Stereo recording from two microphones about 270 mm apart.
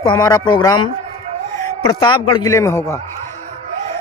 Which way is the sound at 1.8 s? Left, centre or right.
Centre.